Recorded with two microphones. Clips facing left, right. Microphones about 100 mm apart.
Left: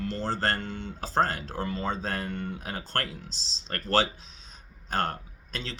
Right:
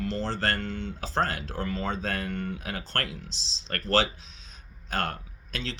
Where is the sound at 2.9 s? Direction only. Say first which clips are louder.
Left 1 dB; 40° left (ahead or behind).